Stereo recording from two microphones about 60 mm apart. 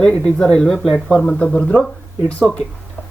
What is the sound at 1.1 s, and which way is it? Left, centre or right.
Speech, centre.